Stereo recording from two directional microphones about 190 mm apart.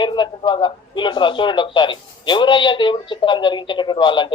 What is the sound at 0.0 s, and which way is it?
A man's voice, 25° left (ahead or behind).